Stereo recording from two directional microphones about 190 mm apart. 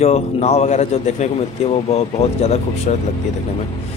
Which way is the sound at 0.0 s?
35° left (ahead or behind).